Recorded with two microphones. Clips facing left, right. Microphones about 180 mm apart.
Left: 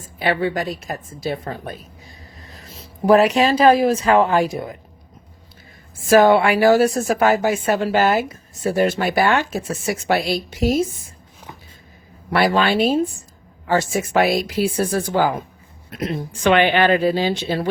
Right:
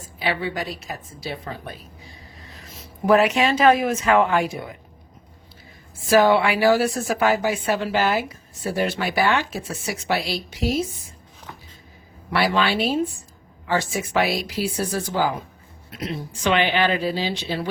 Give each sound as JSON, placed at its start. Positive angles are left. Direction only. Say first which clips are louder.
{"t": 0.2, "sound": "a woman's voice", "louder": "left 5 dB", "side_deg": 50}
{"t": 2.6, "sound": "speech", "louder": "left 3 dB", "side_deg": 30}
{"t": 6.1, "sound": "a woman's voice", "louder": "left 4 dB", "side_deg": 50}
{"t": 12.3, "sound": "a woman's voice", "louder": "left 4 dB", "side_deg": 50}